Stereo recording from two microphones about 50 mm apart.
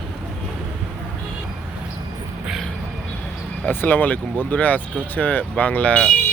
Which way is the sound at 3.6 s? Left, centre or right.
Left.